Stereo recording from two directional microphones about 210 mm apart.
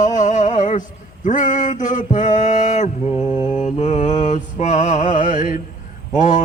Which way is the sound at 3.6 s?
35° left (ahead or behind).